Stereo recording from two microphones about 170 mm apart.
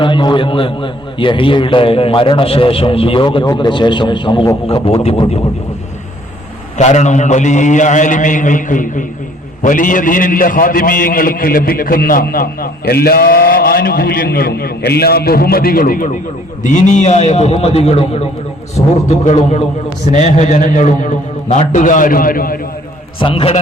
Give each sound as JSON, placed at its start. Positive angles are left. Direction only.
{"t": 0.0, "sound": "a man's voice", "side_deg": 30}
{"t": 6.7, "sound": "a man's voice", "side_deg": 45}
{"t": 23.2, "sound": "a man's voice", "side_deg": 30}